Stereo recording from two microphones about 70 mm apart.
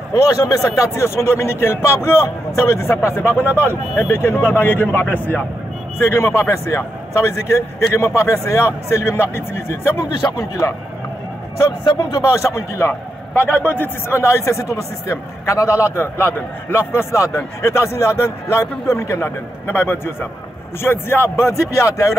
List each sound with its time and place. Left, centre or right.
0.1 s a man's voice: left
5.9 s a man's voice: left
10.1 s a man's voice: left
11.8 s speech: left
12.3 s a man's voice: left